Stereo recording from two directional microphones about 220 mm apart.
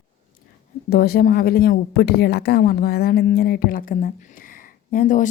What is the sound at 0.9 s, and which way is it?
A woman's voice, 45° left (ahead or behind).